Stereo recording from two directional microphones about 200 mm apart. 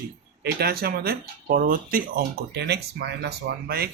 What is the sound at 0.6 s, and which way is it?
Speech, 50° right (ahead or behind).